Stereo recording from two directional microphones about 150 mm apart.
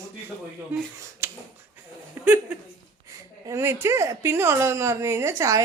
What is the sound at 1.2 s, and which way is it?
Finger snapping, 15° right (ahead or behind).